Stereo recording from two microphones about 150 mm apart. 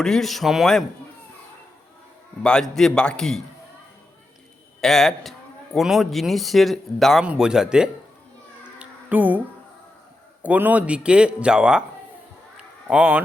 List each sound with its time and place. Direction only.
0.0 s speech: centre (ahead or behind)
2.4 s speech: 5° left (ahead or behind)
4.8 s speech: 5° left (ahead or behind)
8.8 s music: 10° right (ahead or behind)
10.4 s a man's voice: 10° right (ahead or behind)
12.5 s a sound: 10° right (ahead or behind)